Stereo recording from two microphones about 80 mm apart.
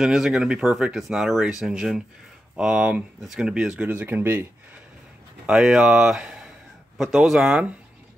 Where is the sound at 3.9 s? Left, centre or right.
Right.